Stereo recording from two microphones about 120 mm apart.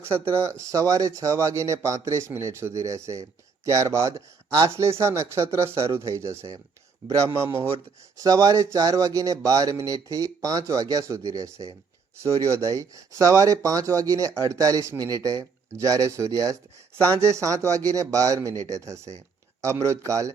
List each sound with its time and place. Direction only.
0.0 s speech: 20° right (ahead or behind)
8.2 s speech: 30° right (ahead or behind)